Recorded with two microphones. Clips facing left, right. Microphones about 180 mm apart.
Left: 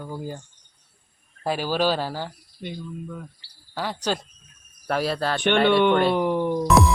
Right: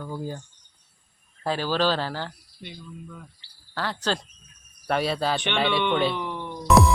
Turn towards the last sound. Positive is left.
turn(degrees=45)  # may be behind; listen again after turning